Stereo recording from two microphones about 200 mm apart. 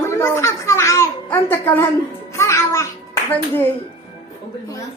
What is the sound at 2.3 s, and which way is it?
Music, 15° left (ahead or behind).